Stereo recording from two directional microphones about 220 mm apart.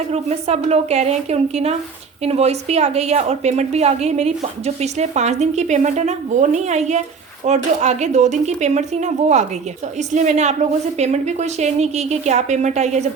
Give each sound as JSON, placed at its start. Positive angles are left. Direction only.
{"t": 0.1, "sound": "a woman's voice", "side_deg": -30}